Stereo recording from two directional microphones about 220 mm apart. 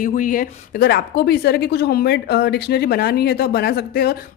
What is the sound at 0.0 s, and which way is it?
A woman's voice, 35° left (ahead or behind).